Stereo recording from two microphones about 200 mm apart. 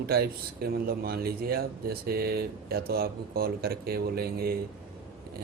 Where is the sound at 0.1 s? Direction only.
50° right (ahead or behind).